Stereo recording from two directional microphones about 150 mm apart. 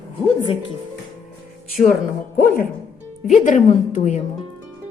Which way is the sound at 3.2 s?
55° left (ahead or behind).